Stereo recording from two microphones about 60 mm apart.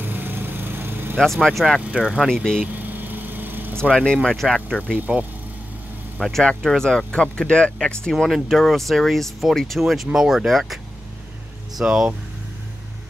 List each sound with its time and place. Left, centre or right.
0.0 s vehicle: right
1.2 s speech: centre
1.8 s speech: centre
2.2 s speech: centre
2.6 s vehicle: right
3.9 s speech: centre
4.2 s speech: centre
4.9 s speech: right
6.1 s speech: centre
8.1 s speech: centre